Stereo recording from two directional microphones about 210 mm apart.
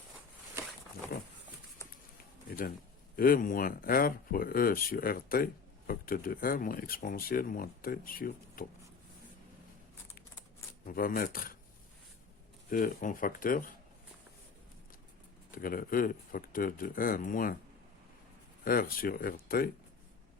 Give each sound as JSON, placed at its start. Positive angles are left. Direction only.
{"t": 1.1, "sound": "speech", "side_deg": 50}
{"t": 1.8, "sound": "a sound", "side_deg": 10}
{"t": 3.2, "sound": "speech", "side_deg": 40}
{"t": 10.8, "sound": "speech", "side_deg": 45}
{"t": 12.7, "sound": "speech", "side_deg": 40}
{"t": 15.5, "sound": "speech", "side_deg": 40}
{"t": 18.6, "sound": "speech", "side_deg": 45}